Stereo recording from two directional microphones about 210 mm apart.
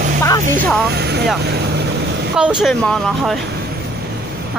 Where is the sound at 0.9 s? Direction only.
50° right (ahead or behind).